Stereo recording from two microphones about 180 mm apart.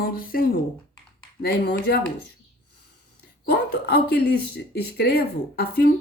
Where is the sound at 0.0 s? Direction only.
55° left (ahead or behind).